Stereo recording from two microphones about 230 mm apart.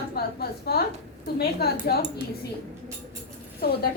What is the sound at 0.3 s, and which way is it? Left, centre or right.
A woman's voice, left.